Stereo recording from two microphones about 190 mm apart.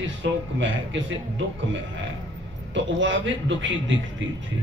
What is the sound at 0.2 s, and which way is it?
Speech, 75° right (ahead or behind).